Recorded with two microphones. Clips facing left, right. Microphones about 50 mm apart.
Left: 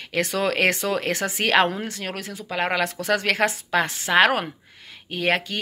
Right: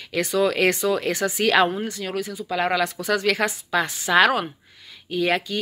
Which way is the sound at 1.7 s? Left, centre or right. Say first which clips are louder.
Right 2 dB; left.